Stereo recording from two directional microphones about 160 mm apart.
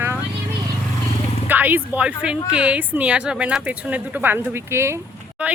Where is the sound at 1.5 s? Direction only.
10° right (ahead or behind).